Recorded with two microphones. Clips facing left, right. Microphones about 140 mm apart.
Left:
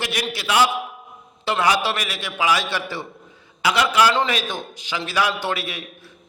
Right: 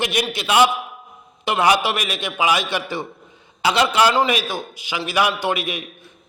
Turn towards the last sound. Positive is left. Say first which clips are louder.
# right 4 dB
turn(degrees=-20)  # may be behind; listen again after turning